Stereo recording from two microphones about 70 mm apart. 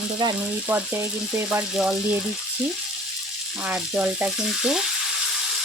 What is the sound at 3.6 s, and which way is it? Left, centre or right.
Frying, centre.